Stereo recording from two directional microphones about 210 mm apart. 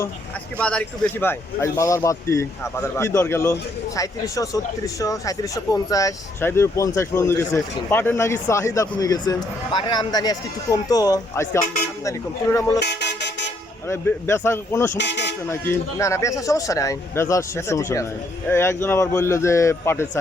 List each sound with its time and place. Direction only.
0.6 s speech: 5° left (ahead or behind)
12.8 s vehicle: 55° left (ahead or behind)
13.8 s speech: 10° left (ahead or behind)
14.9 s speech: 55° left (ahead or behind)
15.4 s speech: 10° left (ahead or behind)